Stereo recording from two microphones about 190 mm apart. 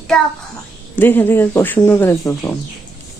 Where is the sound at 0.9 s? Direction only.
10° left (ahead or behind).